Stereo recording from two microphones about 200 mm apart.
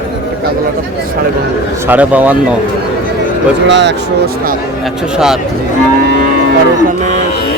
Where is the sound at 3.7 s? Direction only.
60° right (ahead or behind).